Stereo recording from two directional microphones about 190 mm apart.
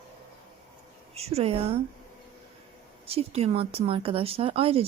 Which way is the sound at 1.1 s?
30° right (ahead or behind).